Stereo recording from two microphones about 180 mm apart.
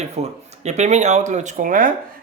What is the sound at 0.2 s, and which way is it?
Speech, 40° right (ahead or behind).